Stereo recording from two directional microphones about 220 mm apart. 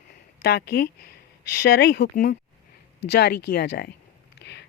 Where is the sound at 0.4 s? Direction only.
50° left (ahead or behind).